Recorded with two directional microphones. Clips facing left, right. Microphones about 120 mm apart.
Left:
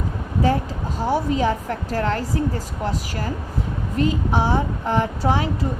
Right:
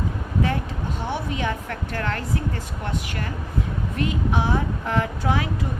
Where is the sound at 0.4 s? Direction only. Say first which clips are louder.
Left 5 dB; 35° left (ahead or behind).